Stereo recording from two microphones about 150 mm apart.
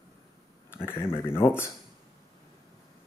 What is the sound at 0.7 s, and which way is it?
Speech, 15° left (ahead or behind).